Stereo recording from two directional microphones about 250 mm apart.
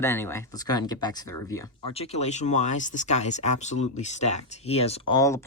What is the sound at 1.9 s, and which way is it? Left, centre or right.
Speech, left.